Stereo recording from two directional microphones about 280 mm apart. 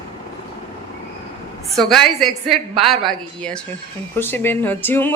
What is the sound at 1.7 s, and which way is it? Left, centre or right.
Speech, centre.